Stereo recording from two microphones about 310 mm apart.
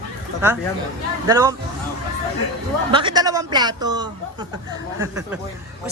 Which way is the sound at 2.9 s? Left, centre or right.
Centre.